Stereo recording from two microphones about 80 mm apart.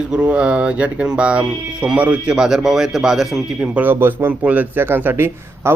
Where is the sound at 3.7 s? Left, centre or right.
Right.